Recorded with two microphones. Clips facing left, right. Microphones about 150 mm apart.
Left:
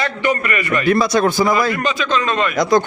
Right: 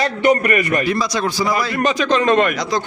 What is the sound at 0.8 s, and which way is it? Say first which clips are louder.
Speech: left 5 dB; 55° left (ahead or behind).